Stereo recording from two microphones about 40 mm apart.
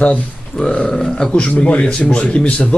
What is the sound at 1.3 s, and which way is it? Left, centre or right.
A man's voice, left.